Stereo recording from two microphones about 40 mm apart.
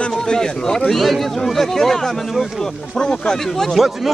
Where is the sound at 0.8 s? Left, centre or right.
Centre.